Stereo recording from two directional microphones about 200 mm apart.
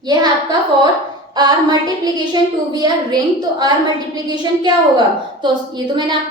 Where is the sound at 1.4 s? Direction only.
20° right (ahead or behind).